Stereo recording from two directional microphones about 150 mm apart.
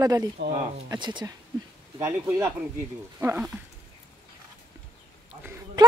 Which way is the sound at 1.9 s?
20° right (ahead or behind).